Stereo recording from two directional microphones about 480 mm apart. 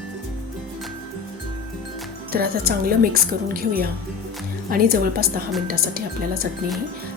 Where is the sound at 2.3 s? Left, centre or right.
Centre.